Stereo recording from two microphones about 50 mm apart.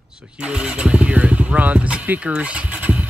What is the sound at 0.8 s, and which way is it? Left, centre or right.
Speech, right.